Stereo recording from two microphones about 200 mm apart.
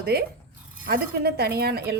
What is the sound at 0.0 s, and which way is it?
A woman's voice, 50° right (ahead or behind).